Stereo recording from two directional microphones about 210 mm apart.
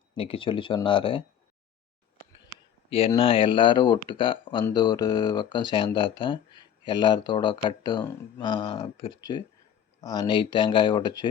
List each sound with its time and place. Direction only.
0.2 s speech: 25° left (ahead or behind)
3.1 s speech: 25° left (ahead or behind)